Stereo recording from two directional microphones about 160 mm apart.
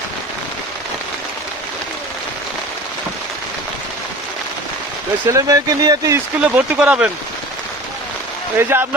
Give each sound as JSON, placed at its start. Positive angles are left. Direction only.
{"t": 5.3, "sound": "speech", "side_deg": -20}
{"t": 6.4, "sound": "speech", "side_deg": -10}
{"t": 8.5, "sound": "speech", "side_deg": -15}